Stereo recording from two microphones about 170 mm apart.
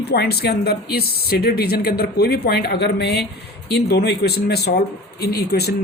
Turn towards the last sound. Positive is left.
turn(degrees=70)  # may be behind; listen again after turning